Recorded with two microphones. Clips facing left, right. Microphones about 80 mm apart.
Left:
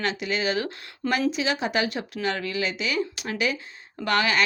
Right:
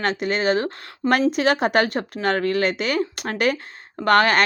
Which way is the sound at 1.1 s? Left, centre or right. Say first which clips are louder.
Right 6 dB; right.